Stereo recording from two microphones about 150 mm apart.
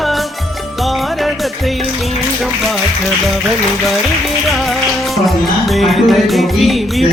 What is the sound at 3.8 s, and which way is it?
Music, centre (ahead or behind).